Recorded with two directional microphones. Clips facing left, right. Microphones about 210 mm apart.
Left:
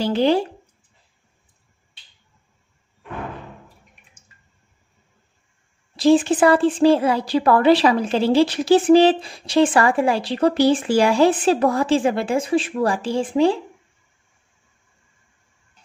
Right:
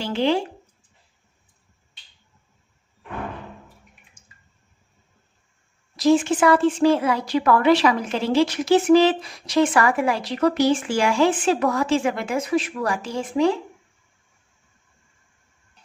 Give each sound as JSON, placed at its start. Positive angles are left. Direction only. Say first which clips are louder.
{"t": 0.0, "sound": "a woman's voice", "louder": "left 4 dB", "side_deg": 40}
{"t": 5.9, "sound": "a woman's voice", "louder": "left 3 dB", "side_deg": 30}